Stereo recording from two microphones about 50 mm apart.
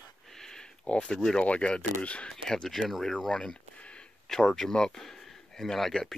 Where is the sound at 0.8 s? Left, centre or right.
Left.